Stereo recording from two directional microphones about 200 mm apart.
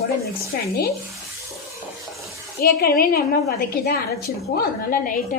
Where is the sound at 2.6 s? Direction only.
50° left (ahead or behind).